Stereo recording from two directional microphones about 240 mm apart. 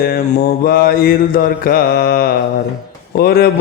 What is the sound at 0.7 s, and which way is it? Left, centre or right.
Mantra, left.